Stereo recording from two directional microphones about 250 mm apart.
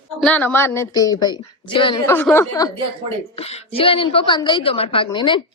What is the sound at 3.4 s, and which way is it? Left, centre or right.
A woman's voice, left.